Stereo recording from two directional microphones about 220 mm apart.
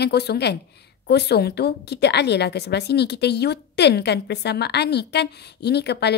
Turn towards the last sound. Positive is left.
turn(degrees=50)  # may be behind; listen again after turning